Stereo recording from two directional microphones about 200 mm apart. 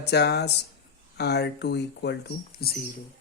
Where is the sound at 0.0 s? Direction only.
55° left (ahead or behind).